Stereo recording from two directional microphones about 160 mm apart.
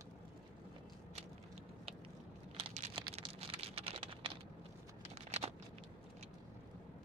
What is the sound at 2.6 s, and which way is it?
Typing, 35° right (ahead or behind).